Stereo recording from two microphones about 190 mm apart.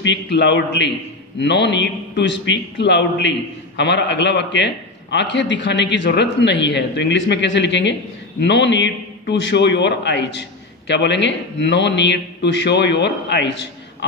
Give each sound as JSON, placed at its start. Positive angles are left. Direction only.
{"t": 0.0, "sound": "a man's voice", "side_deg": 65}